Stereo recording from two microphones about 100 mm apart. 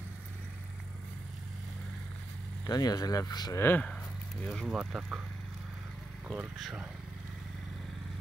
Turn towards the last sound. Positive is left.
turn(degrees=-5)  # may be behind; listen again after turning